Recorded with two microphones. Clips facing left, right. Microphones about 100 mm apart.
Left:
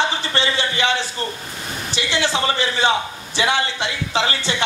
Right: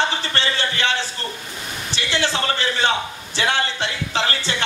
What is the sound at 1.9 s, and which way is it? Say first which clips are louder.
A man's voice: left 1 dB; 15° left (ahead or behind).